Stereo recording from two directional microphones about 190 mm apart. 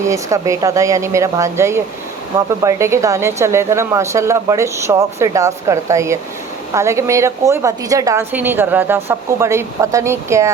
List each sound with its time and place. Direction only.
0.0 s speech: 15° right (ahead or behind)